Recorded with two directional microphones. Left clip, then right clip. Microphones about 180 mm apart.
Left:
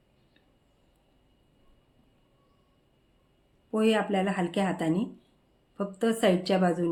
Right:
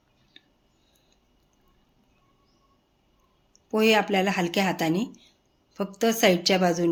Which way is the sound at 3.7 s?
15° right (ahead or behind).